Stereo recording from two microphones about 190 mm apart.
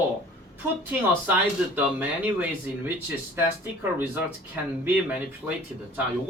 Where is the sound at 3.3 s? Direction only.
10° right (ahead or behind).